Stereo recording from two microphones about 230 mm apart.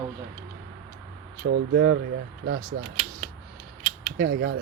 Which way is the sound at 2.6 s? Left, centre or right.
Right.